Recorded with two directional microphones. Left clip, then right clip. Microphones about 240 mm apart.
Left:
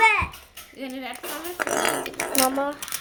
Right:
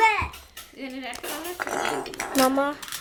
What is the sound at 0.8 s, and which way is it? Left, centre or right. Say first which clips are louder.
Dishes: left 1 dB; left.